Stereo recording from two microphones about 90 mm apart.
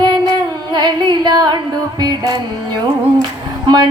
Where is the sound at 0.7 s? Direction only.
50° right (ahead or behind).